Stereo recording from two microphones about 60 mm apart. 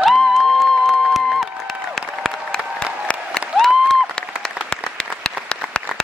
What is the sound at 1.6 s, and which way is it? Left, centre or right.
Applause, centre.